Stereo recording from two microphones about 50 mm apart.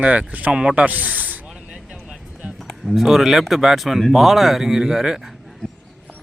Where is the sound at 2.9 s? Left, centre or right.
Centre.